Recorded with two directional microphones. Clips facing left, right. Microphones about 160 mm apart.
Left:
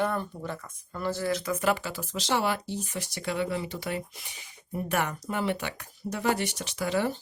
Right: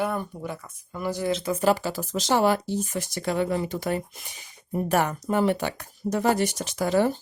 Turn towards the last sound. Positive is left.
turn(degrees=-40)  # may be behind; listen again after turning